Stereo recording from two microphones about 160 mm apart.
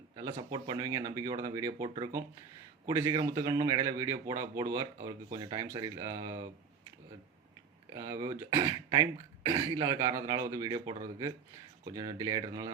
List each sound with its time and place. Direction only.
0.5 s a man's voice: 25° right (ahead or behind)
7.9 s a man's voice: 20° right (ahead or behind)